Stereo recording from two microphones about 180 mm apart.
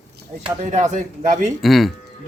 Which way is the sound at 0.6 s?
40° right (ahead or behind).